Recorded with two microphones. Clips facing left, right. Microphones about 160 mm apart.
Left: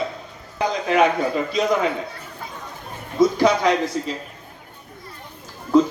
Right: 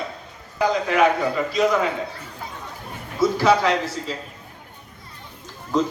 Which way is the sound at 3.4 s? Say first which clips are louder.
Left 1 dB; 15° left (ahead or behind).